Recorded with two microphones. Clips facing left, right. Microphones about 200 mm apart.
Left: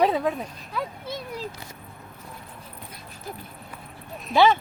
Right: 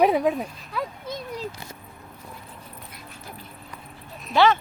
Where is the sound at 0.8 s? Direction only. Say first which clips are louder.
Right 1 dB; centre (ahead or behind).